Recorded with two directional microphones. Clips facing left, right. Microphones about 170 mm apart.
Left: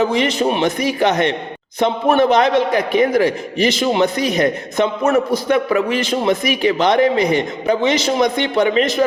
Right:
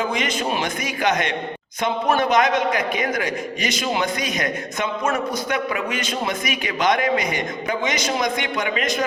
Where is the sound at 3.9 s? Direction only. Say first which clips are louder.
Left 7 dB; 30° left (ahead or behind).